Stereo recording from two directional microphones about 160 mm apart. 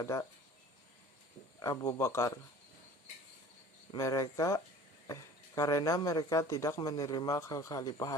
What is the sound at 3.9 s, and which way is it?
Speech, 20° left (ahead or behind).